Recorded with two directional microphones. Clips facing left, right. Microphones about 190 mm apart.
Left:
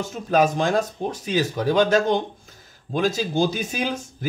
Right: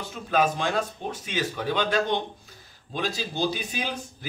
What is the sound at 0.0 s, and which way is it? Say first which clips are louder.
Speech: left 5 dB; 40° left (ahead or behind).